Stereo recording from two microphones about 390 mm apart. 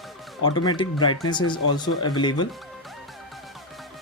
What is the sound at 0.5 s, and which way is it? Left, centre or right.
Speech, centre.